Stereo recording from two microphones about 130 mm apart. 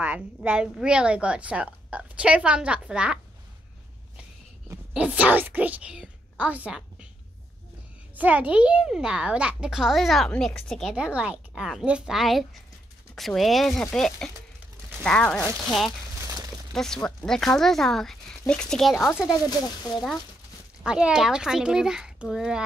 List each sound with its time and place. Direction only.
0.0 s a woman's voice: 10° right (ahead or behind)
4.9 s a woman's voice: 10° right (ahead or behind)
8.2 s a child's voice: 10° right (ahead or behind)
11.0 s a child's voice: 10° right (ahead or behind); by 15.4 s 5° left (ahead or behind)
16.7 s a child's voice: 5° left (ahead or behind)